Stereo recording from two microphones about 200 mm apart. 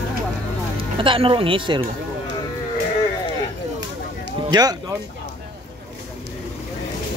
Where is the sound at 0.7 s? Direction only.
25° right (ahead or behind).